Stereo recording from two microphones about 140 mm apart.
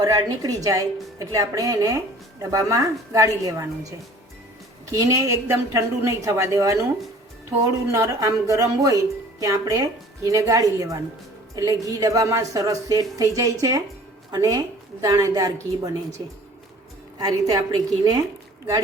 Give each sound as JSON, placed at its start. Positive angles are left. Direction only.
{"t": 0.0, "sound": "speech", "side_deg": -25}
{"t": 4.9, "sound": "speech", "side_deg": -25}